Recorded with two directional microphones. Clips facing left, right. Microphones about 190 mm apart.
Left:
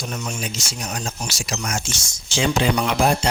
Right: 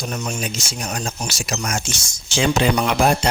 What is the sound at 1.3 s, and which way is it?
Speech, 60° right (ahead or behind).